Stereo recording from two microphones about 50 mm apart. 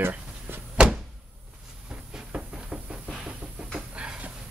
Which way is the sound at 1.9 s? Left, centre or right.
Centre.